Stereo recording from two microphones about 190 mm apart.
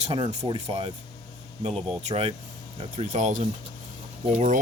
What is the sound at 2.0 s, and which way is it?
Speech, 35° right (ahead or behind).